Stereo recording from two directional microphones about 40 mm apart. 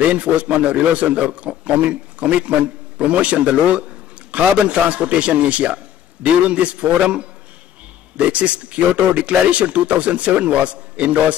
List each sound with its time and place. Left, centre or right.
0.1 s speech: right
8.3 s speech: right